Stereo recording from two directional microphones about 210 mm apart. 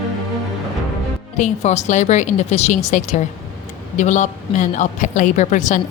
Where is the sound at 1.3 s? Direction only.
35° left (ahead or behind).